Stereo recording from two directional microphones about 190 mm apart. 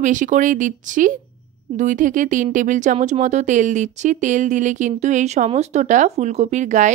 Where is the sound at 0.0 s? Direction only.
40° right (ahead or behind).